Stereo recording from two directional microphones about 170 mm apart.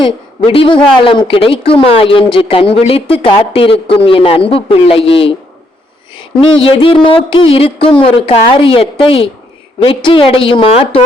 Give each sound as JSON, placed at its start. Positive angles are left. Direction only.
{"t": 0.0, "sound": "a man's voice", "side_deg": 30}
{"t": 6.4, "sound": "speech", "side_deg": 30}